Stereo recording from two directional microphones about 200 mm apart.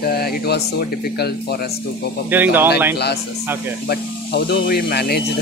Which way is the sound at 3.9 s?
55° left (ahead or behind).